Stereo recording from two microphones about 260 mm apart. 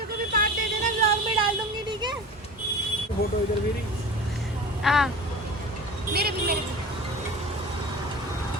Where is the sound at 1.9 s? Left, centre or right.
Centre.